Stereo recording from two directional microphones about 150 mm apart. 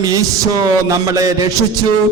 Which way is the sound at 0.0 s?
25° right (ahead or behind).